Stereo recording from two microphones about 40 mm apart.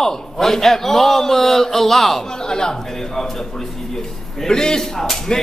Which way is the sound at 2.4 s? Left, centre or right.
Centre.